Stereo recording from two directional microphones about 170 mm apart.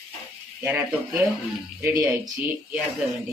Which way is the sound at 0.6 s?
10° right (ahead or behind).